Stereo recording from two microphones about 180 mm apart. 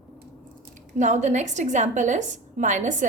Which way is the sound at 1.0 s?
40° right (ahead or behind).